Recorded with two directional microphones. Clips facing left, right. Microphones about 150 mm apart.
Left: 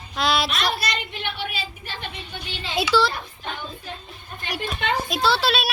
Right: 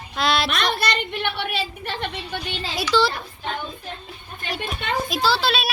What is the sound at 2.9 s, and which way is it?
Speech, 10° left (ahead or behind).